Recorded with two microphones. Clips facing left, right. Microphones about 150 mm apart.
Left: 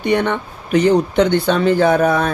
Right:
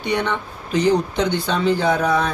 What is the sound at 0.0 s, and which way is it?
Speech, 50° left (ahead or behind).